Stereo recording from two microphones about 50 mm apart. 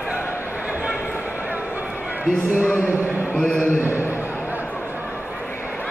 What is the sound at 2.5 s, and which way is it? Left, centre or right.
Speech, right.